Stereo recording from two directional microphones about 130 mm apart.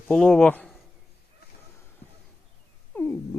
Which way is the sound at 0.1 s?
5° left (ahead or behind).